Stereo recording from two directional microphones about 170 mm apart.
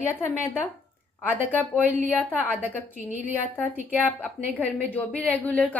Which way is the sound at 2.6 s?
10° right (ahead or behind).